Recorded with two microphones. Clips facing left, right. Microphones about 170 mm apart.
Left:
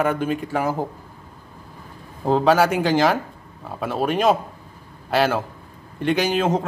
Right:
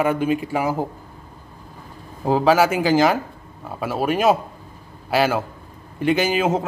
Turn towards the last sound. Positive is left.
turn(degrees=-5)  # may be behind; listen again after turning